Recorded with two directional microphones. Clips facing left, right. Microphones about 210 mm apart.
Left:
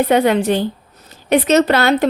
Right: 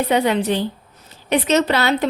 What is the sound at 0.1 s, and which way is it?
Speech, 50° left (ahead or behind).